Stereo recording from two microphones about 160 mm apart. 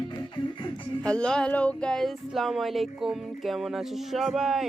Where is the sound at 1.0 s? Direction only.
5° left (ahead or behind).